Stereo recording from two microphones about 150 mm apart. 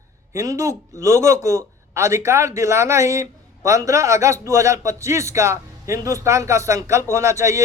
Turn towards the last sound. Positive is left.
turn(degrees=-20)  # may be behind; listen again after turning